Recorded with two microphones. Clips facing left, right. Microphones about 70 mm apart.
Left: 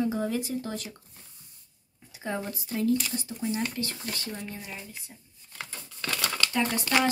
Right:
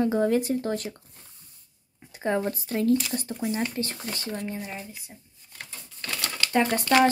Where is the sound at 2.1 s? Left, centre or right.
Right.